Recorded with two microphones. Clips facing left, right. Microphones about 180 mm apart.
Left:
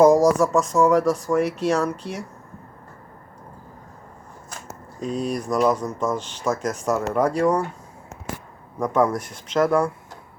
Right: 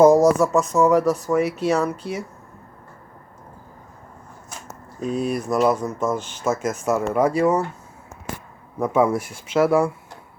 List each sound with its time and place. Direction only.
0.0 s speech: 5° right (ahead or behind)
4.9 s speech: 5° right (ahead or behind)
8.8 s speech: 5° right (ahead or behind)